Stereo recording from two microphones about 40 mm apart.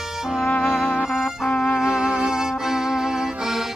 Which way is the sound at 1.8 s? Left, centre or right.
Centre.